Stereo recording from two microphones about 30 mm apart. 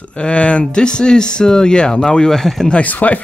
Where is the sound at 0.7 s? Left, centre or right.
Left.